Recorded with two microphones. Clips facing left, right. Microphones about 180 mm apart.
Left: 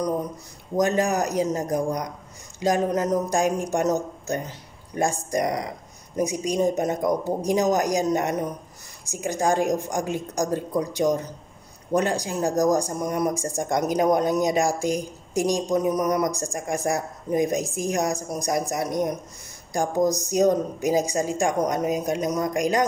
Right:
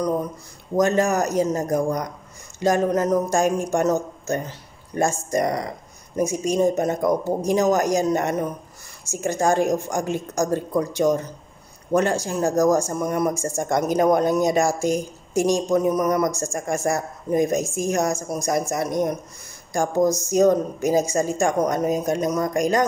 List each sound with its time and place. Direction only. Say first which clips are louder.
0.7 s speech: right 2 dB; 15° left (ahead or behind)